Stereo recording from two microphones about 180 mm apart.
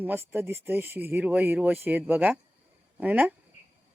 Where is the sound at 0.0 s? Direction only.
10° right (ahead or behind).